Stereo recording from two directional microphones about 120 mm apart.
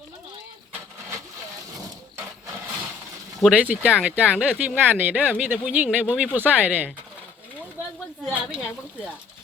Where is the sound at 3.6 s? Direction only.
10° right (ahead or behind).